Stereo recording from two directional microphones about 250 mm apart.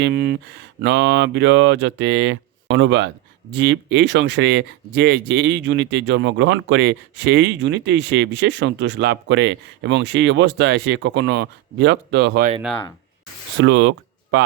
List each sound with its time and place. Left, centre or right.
0.0 s speech: right
12.6 s speech: centre
13.6 s speech: right